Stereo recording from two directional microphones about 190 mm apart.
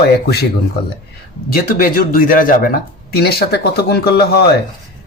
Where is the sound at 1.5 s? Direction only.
50° left (ahead or behind).